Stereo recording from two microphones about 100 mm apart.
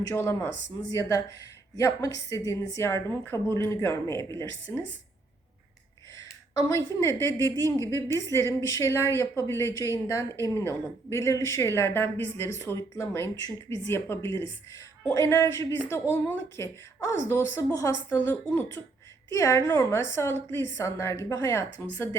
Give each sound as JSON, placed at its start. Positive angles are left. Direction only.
{"t": 0.0, "sound": "a woman's voice", "side_deg": 30}
{"t": 6.1, "sound": "a woman's voice", "side_deg": 35}